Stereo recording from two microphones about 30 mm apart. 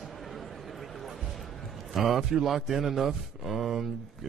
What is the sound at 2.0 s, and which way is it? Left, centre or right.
Speech, centre.